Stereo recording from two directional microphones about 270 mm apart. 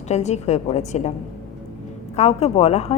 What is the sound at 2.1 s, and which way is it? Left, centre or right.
Speech, left.